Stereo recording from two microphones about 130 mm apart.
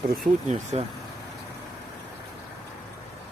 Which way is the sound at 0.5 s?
55° right (ahead or behind).